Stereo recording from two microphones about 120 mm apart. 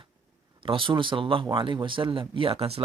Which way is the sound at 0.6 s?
45° right (ahead or behind).